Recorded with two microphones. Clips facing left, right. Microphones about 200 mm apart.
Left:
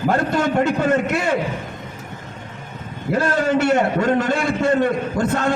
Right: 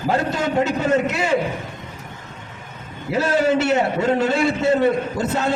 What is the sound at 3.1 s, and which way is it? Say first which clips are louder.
A man's voice: right 1 dB; 55° left (ahead or behind).